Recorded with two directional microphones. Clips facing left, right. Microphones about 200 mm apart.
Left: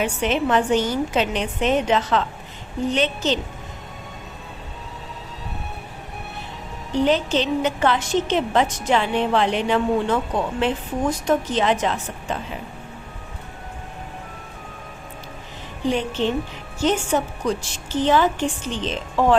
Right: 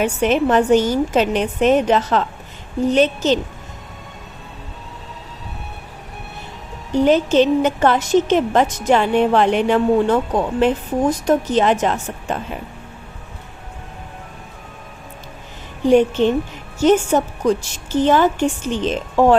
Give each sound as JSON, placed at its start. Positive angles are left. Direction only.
{"t": 0.0, "sound": "a woman's voice", "side_deg": -45}
{"t": 6.9, "sound": "a woman's voice", "side_deg": -45}
{"t": 15.9, "sound": "a woman's voice", "side_deg": -50}